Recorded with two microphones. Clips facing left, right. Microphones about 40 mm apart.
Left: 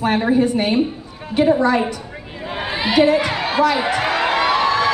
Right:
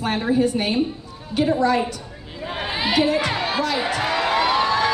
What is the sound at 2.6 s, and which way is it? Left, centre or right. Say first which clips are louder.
Speech: left 5 dB; centre.